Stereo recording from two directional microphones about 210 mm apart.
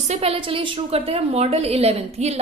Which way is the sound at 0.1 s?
30° right (ahead or behind).